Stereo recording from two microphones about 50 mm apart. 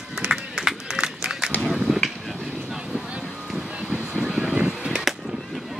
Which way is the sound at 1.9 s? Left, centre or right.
Centre.